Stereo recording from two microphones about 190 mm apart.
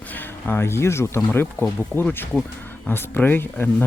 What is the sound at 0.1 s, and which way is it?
Speech, 10° left (ahead or behind).